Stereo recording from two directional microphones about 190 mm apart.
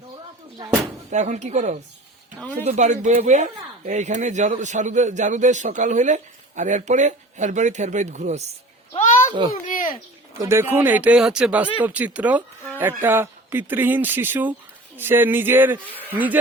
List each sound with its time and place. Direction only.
1.1 s speech: 35° right (ahead or behind)
2.4 s speech: 10° left (ahead or behind)
2.6 s speech: 35° right (ahead or behind)
9.6 s a sound: 45° left (ahead or behind)
10.4 s a man's voice: 15° right (ahead or behind)